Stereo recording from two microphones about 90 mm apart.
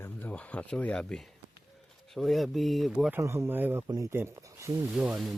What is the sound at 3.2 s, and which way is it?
Speech, 30° right (ahead or behind).